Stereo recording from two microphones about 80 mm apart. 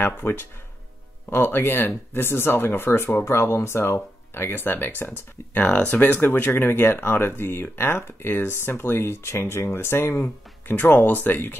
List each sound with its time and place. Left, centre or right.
0.0 s speech: left